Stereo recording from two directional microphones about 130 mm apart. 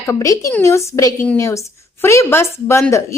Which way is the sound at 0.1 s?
25° left (ahead or behind).